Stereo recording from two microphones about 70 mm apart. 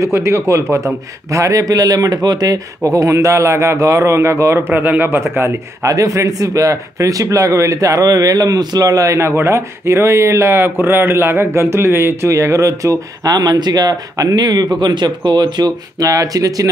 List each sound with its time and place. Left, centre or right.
0.0 s a man's voice: right
2.9 s a man's voice: right
5.9 s a man's voice: right